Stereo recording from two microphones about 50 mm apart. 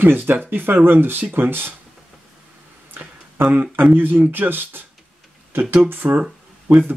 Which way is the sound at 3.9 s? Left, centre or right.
Right.